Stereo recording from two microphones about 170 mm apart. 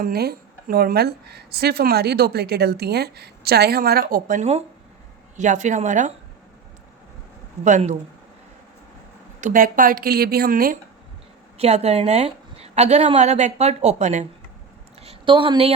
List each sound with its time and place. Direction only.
0.0 s speech: 65° right (ahead or behind); by 6.1 s 45° right (ahead or behind)
7.6 s speech: 45° right (ahead or behind)
9.4 s speech: 50° right (ahead or behind)
11.5 s a woman's voice: 40° right (ahead or behind)
15.0 s a woman's voice: 30° right (ahead or behind)